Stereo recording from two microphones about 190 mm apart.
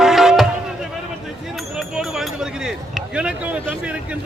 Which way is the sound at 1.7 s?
Centre (ahead or behind).